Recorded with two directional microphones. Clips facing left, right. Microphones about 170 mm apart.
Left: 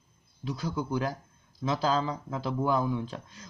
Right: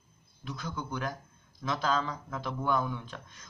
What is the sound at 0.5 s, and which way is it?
A man's voice, 30° left (ahead or behind).